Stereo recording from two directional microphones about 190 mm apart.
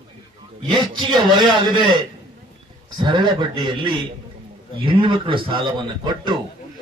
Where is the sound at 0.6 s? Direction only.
25° right (ahead or behind).